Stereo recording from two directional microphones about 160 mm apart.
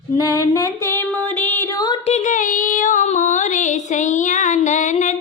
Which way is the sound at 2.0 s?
45° left (ahead or behind).